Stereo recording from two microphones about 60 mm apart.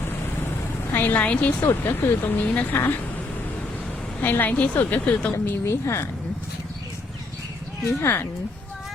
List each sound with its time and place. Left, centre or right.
0.9 s a woman's voice: left
1.6 s speech: left
2.5 s a woman's voice: left
2.7 s speech: left
4.2 s a woman's voice: left
5.5 s speech: left
5.8 s speech: left
8.0 s speech: left